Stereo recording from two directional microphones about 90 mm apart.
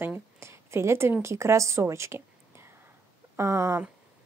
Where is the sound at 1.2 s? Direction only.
30° right (ahead or behind).